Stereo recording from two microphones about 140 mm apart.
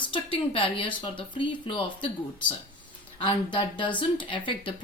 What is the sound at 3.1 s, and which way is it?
Speech, 35° left (ahead or behind).